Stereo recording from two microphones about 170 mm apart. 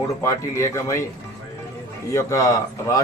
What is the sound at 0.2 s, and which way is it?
Speech, 15° left (ahead or behind).